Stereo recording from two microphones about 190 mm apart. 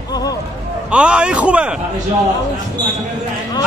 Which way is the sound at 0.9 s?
5° right (ahead or behind).